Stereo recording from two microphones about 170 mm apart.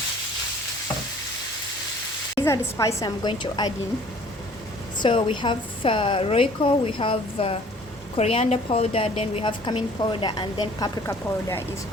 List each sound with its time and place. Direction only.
2.4 s a woman's voice: 20° left (ahead or behind)
4.9 s a woman's voice: 30° left (ahead or behind)